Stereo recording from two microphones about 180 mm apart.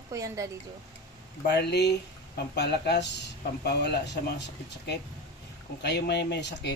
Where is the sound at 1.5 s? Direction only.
65° left (ahead or behind).